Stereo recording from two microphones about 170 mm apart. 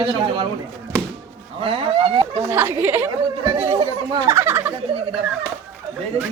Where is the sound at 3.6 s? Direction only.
30° right (ahead or behind).